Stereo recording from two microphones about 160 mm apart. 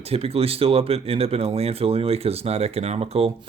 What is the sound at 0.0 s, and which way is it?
Speech, 40° right (ahead or behind).